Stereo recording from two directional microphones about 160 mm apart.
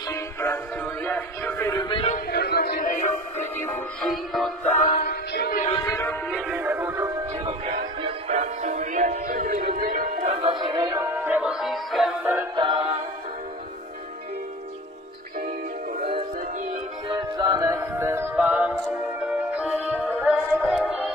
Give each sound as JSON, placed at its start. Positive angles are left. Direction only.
{"t": 0.1, "sound": "music", "side_deg": 15}
{"t": 2.1, "sound": "music", "side_deg": 80}
{"t": 3.3, "sound": "music", "side_deg": 15}
{"t": 4.0, "sound": "music", "side_deg": 0}
{"t": 4.7, "sound": "music", "side_deg": 65}
{"t": 5.8, "sound": "music", "side_deg": 20}
{"t": 6.4, "sound": "music", "side_deg": -10}
{"t": 7.3, "sound": "music", "side_deg": -35}
{"t": 10.4, "sound": "music", "side_deg": -30}
{"t": 11.1, "sound": "music", "side_deg": -10}
{"t": 12.5, "sound": "music", "side_deg": -30}
{"t": 17.1, "sound": "music", "side_deg": -25}